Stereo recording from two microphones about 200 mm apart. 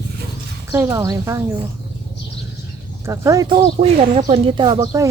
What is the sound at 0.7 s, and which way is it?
Speech, 15° right (ahead or behind).